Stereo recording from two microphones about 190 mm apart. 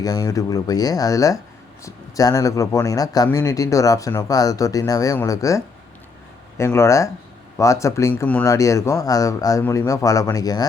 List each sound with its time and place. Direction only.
0.0 s speech: 20° left (ahead or behind)